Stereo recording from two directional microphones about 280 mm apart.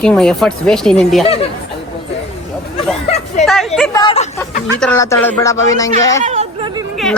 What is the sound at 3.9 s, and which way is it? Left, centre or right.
A woman's voice, centre.